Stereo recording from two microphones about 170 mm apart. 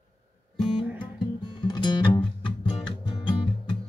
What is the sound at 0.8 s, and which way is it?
Music, 10° right (ahead or behind).